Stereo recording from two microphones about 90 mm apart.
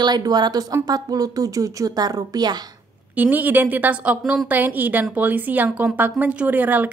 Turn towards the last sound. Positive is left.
turn(degrees=-20)  # may be behind; listen again after turning